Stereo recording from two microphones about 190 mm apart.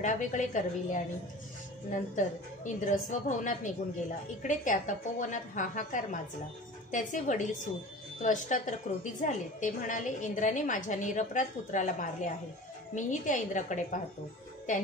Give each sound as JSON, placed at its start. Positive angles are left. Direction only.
{"t": 0.0, "sound": "a woman's voice", "side_deg": 40}